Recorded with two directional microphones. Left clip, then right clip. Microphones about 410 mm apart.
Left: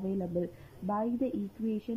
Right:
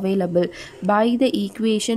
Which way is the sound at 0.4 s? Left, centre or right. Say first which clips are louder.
Right 15 dB; centre.